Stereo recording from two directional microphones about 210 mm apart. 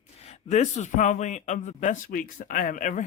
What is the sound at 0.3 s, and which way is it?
A man's voice, 30° left (ahead or behind).